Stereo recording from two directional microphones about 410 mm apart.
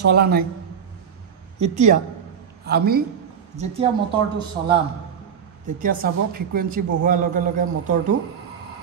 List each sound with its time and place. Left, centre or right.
0.1 s a man's voice: right
1.6 s a man's voice: centre
5.8 s a man's voice: centre